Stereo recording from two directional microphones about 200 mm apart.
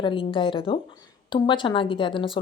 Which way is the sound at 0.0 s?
25° left (ahead or behind).